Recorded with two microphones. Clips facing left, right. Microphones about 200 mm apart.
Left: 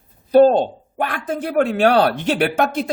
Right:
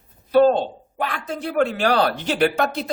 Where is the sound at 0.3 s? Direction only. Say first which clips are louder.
Left 4 dB; 40° left (ahead or behind).